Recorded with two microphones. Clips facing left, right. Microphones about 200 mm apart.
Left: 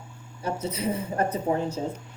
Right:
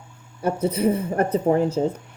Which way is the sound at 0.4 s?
55° right (ahead or behind).